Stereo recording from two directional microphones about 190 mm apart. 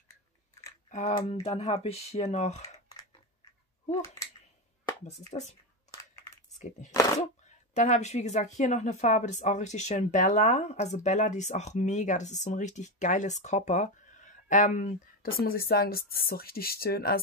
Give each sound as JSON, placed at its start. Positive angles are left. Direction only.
{"t": 0.8, "sound": "speech", "side_deg": 40}
{"t": 5.0, "sound": "speech", "side_deg": 35}
{"t": 7.7, "sound": "speech", "side_deg": 40}